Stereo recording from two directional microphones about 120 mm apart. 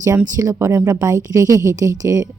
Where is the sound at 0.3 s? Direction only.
30° right (ahead or behind).